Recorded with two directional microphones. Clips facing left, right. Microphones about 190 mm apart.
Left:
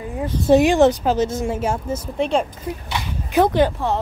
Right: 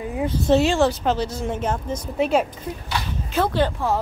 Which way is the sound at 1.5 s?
10° left (ahead or behind).